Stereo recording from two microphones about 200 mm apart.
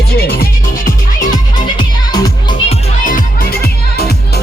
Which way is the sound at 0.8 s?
40° left (ahead or behind).